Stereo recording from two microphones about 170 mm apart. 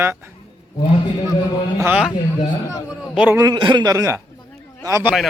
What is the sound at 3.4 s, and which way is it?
Speech, 25° right (ahead or behind).